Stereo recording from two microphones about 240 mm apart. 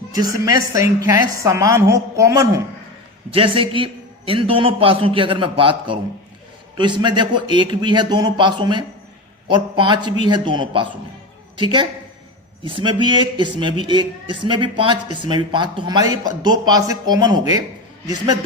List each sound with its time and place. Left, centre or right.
0.1 s a man's voice: centre